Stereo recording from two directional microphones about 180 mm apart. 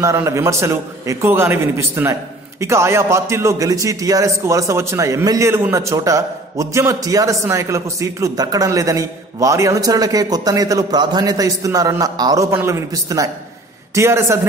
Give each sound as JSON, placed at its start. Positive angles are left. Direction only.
{"t": 0.0, "sound": "a man's voice", "side_deg": -15}